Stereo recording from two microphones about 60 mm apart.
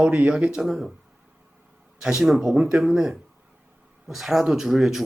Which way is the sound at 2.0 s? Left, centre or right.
Centre.